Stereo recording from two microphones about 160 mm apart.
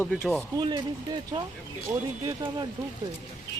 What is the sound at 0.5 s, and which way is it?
Speech, 25° right (ahead or behind).